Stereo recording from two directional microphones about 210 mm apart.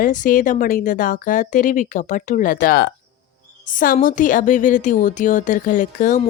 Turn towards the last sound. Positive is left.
turn(degrees=40)  # may be behind; listen again after turning